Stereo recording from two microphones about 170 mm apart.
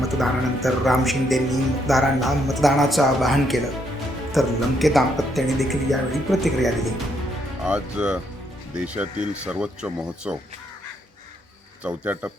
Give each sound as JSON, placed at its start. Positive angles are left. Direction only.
{"t": 0.0, "sound": "a man's voice", "side_deg": 0}
{"t": 11.8, "sound": "speech", "side_deg": -10}